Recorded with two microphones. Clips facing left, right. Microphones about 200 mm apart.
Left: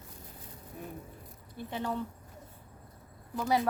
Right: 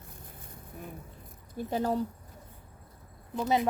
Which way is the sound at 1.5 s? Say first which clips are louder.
Right 6 dB; 40° right (ahead or behind).